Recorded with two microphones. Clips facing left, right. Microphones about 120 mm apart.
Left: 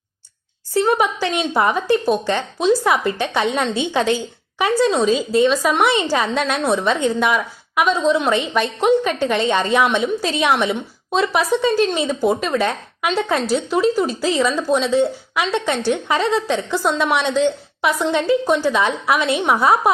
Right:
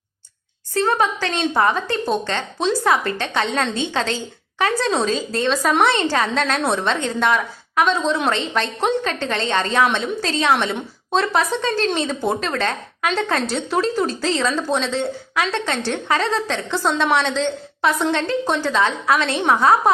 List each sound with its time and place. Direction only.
0.7 s a woman's voice: 10° left (ahead or behind)
4.7 s a woman's voice: centre (ahead or behind)
16.0 s a woman's voice: 20° left (ahead or behind)
16.3 s a woman's voice: 5° left (ahead or behind)